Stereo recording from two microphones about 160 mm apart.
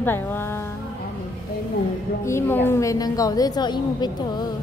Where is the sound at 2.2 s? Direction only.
15° left (ahead or behind).